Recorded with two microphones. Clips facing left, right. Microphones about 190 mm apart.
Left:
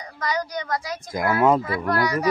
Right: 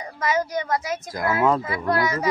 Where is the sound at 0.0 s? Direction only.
20° right (ahead or behind).